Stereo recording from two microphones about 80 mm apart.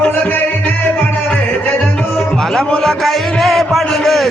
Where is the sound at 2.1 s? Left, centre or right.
Centre.